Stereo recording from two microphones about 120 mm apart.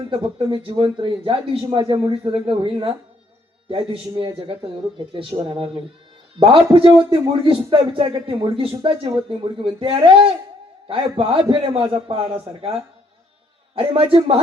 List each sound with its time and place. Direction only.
0.1 s a man's voice: 50° right (ahead or behind)
6.7 s a man's voice: 50° right (ahead or behind)
13.7 s a man's voice: 50° right (ahead or behind)